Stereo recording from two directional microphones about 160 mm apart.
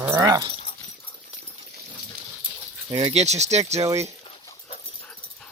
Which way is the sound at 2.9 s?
40° right (ahead or behind).